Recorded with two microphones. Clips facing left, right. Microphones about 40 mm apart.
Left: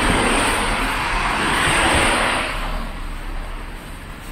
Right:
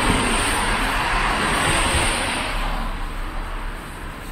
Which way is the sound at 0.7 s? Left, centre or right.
Centre.